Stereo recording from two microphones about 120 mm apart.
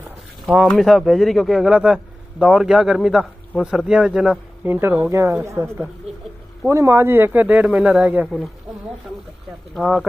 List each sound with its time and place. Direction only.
0.7 s a man's voice: centre (ahead or behind)
4.6 s a man's voice: 15° right (ahead or behind)
9.8 s a man's voice: centre (ahead or behind)